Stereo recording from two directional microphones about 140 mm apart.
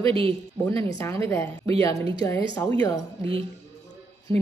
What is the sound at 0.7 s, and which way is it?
A woman's voice, 20° left (ahead or behind).